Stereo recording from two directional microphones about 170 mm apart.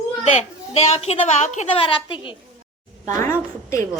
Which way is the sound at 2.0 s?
30° left (ahead or behind).